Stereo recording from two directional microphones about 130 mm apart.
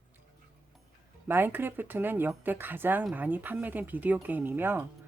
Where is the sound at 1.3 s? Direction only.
15° right (ahead or behind).